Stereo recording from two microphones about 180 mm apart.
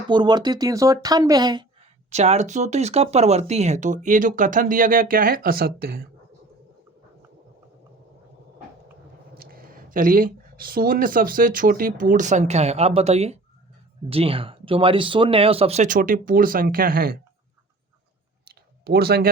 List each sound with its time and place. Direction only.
0.1 s speech: 25° right (ahead or behind)
2.0 s speech: 40° right (ahead or behind); by 6.1 s 55° right (ahead or behind)
9.4 s speech: 55° right (ahead or behind)
18.4 s clicking: 60° right (ahead or behind)